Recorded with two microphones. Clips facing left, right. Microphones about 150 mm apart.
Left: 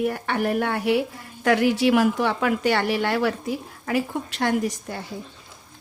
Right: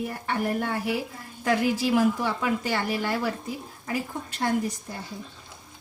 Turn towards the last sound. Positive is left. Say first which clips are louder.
# left 3 dB
turn(degrees=75)  # may be behind; listen again after turning